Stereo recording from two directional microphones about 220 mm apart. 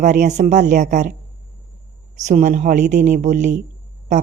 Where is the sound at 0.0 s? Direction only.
35° right (ahead or behind).